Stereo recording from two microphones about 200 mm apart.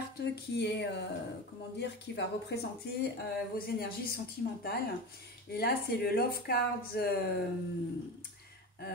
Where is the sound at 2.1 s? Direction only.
55° left (ahead or behind).